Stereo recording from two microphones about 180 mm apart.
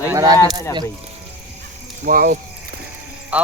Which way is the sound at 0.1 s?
20° right (ahead or behind).